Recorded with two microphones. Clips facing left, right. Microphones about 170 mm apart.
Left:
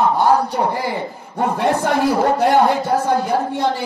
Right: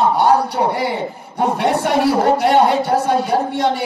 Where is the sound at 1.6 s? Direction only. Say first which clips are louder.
Even; 75° right (ahead or behind).